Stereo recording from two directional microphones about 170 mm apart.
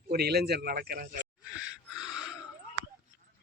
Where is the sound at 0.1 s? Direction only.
70° right (ahead or behind).